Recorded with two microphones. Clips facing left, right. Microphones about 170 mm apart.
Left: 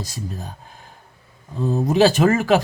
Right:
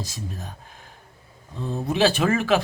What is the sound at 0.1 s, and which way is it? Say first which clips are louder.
Speech: left 4 dB; 35° left (ahead or behind).